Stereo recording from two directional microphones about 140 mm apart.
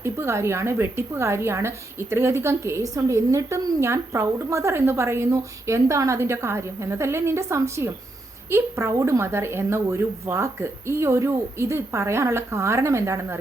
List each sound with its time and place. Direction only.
0.0 s a woman's voice: 20° right (ahead or behind)